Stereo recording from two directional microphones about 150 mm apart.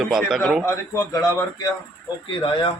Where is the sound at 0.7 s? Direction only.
20° left (ahead or behind).